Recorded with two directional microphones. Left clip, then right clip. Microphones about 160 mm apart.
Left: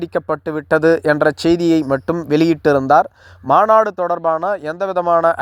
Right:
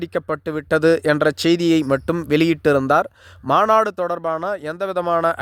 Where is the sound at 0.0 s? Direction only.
10° right (ahead or behind).